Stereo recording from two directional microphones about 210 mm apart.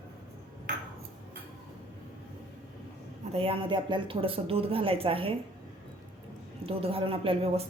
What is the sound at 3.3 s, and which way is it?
Speech, 25° right (ahead or behind).